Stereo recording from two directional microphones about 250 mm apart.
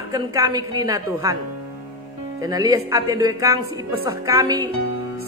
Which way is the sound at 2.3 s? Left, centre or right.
Centre.